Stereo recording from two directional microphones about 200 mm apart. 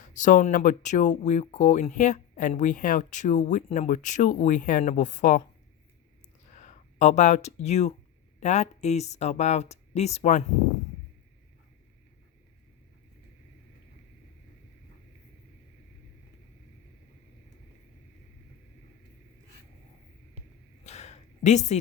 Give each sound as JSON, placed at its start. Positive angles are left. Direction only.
{"t": 0.0, "sound": "speech", "side_deg": 40}
{"t": 6.5, "sound": "speech", "side_deg": 35}
{"t": 20.8, "sound": "a sound", "side_deg": 35}